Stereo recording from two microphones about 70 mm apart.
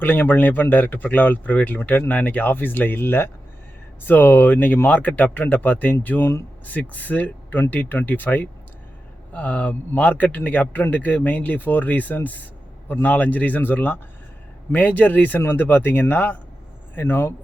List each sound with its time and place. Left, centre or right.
0.0 s speech: left
6.7 s speech: left